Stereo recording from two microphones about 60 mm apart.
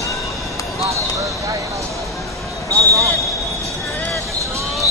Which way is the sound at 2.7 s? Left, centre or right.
Right.